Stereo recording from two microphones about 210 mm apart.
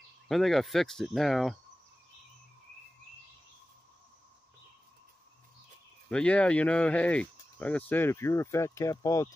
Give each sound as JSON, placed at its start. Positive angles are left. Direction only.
{"t": 0.3, "sound": "speech", "side_deg": 0}
{"t": 6.0, "sound": "speech", "side_deg": 5}